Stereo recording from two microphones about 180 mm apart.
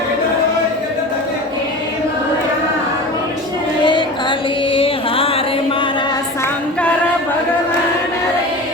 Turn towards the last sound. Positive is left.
turn(degrees=5)  # may be behind; listen again after turning